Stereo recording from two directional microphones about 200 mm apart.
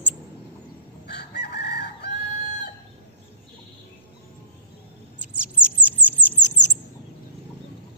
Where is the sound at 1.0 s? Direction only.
55° left (ahead or behind).